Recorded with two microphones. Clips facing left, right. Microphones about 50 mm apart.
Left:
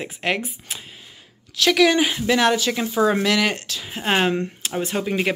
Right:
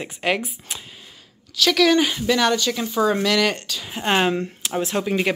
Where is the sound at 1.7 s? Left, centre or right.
Centre.